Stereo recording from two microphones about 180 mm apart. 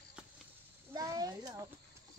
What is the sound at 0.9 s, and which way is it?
Speech, 20° right (ahead or behind).